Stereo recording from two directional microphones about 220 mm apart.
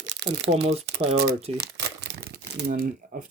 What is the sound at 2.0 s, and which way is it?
Crumpling, 50° right (ahead or behind).